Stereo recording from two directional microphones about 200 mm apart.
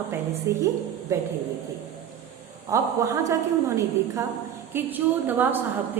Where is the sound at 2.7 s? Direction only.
15° right (ahead or behind).